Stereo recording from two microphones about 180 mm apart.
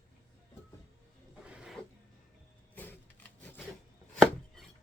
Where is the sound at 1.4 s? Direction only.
5° right (ahead or behind).